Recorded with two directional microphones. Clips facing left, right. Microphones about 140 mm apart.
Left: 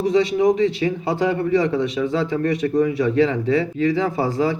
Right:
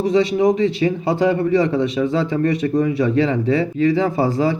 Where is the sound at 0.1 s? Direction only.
25° right (ahead or behind).